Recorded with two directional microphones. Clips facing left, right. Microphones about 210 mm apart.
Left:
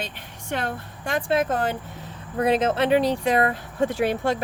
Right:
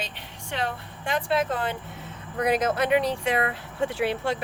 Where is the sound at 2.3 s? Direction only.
25° left (ahead or behind); by 4.4 s 45° left (ahead or behind).